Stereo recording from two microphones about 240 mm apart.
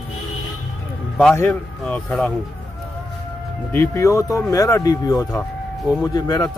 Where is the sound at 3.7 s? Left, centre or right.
Centre.